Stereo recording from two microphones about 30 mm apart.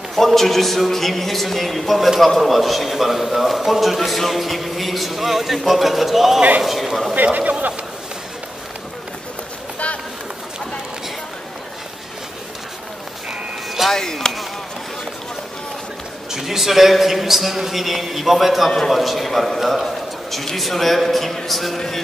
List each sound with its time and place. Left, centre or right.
0.1 s a man's voice: centre
13.8 s chop: centre
16.3 s a man's voice: centre
21.7 s speech: centre